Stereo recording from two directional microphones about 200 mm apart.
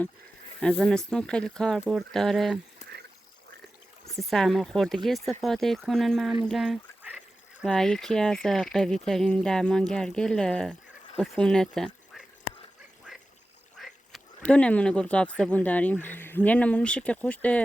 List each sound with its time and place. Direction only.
0.6 s speech: 5° left (ahead or behind)
4.1 s speech: centre (ahead or behind)
13.7 s speech: centre (ahead or behind)